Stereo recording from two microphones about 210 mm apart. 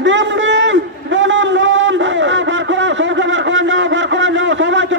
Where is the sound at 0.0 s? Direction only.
60° right (ahead or behind).